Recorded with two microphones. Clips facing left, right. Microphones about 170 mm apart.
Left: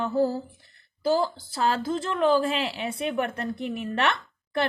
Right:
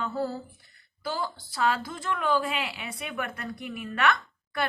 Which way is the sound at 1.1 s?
25° left (ahead or behind).